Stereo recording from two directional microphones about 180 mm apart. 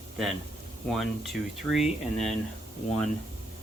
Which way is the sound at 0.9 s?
Centre (ahead or behind).